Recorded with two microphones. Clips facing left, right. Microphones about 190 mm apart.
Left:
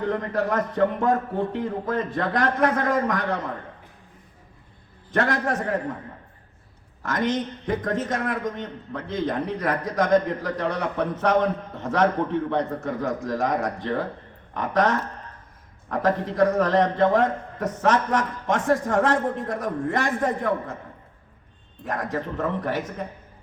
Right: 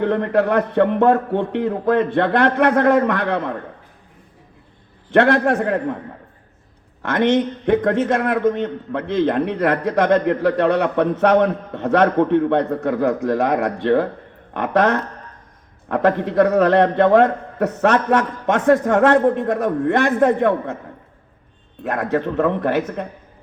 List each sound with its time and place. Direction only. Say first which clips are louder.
0.0 s a man's voice: right 7 dB; 65° right (ahead or behind)
5.1 s a man's voice: right 9 dB; 65° right (ahead or behind)
7.0 s a man's voice: right 8 dB; 70° right (ahead or behind)
21.8 s a man's voice: right 7 dB; 65° right (ahead or behind)